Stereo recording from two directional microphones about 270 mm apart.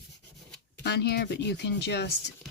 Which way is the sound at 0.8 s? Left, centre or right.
Left.